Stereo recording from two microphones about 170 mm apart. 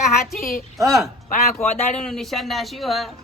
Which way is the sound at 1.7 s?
40° left (ahead or behind).